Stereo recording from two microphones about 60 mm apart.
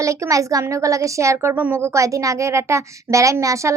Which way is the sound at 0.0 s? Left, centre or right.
Right.